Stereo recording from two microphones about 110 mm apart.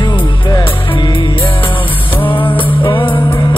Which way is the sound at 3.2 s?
35° left (ahead or behind).